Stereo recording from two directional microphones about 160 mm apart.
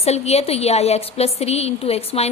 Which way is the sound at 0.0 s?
40° left (ahead or behind).